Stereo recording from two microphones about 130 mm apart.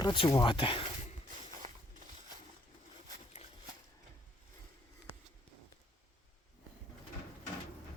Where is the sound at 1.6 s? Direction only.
60° right (ahead or behind).